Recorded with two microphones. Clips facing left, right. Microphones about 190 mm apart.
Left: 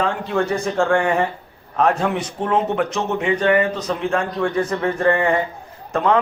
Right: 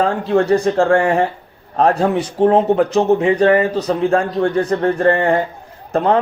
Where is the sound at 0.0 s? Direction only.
35° right (ahead or behind).